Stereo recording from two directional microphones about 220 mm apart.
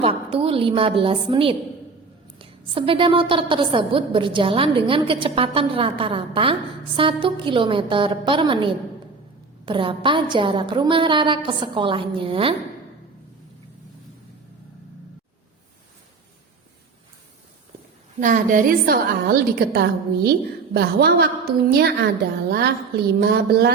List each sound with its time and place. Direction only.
0.0 s a woman's voice: 25° right (ahead or behind)
18.2 s a woman's voice: 35° right (ahead or behind)